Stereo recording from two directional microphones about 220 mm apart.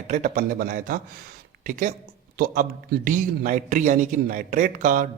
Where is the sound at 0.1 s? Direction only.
35° right (ahead or behind).